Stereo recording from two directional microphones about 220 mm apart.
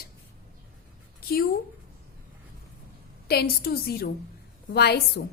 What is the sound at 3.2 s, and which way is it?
A woman's voice, 45° left (ahead or behind).